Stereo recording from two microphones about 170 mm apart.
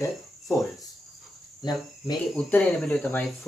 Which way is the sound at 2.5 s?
10° left (ahead or behind).